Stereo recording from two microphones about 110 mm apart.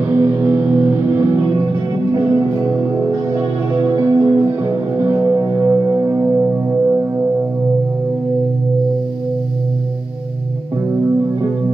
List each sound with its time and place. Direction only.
0.1 s music: 25° right (ahead or behind)